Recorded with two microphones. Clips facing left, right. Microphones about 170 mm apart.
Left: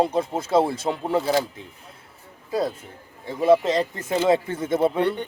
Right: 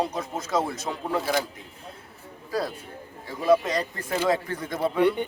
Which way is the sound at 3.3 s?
25° left (ahead or behind).